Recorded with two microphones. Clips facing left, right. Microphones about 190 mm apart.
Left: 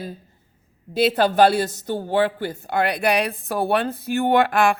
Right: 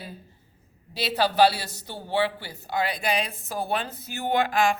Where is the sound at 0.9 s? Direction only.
50° left (ahead or behind).